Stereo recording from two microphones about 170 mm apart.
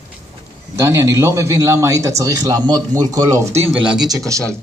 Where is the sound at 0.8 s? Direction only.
15° right (ahead or behind).